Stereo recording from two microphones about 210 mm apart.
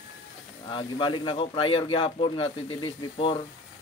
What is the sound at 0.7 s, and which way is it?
Speech, 25° left (ahead or behind).